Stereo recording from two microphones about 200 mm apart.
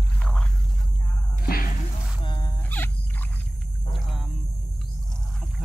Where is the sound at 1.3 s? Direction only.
45° left (ahead or behind).